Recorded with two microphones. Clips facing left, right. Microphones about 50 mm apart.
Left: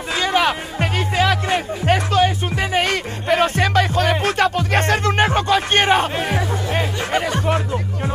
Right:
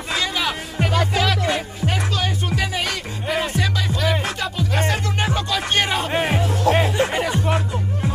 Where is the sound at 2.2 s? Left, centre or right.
Left.